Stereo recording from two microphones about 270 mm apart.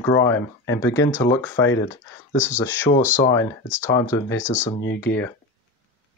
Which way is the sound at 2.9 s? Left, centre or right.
Left.